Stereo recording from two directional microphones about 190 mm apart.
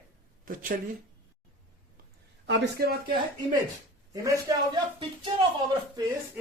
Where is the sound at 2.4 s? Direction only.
60° right (ahead or behind).